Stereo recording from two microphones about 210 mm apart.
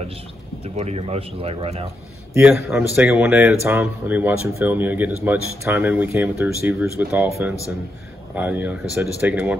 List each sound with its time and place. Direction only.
0.7 s speech: 30° right (ahead or behind)
2.3 s speech: 10° right (ahead or behind)